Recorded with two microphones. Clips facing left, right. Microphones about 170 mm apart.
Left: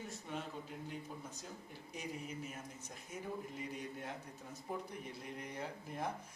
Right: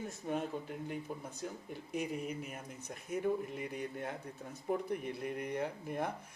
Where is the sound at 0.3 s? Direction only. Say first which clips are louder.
Right 8 dB; 50° right (ahead or behind).